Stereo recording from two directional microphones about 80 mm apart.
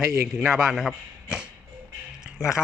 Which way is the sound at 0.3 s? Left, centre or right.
Centre.